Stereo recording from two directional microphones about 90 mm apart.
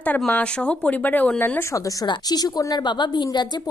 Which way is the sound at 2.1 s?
45° left (ahead or behind).